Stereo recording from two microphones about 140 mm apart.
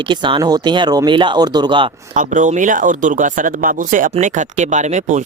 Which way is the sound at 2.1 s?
65° right (ahead or behind).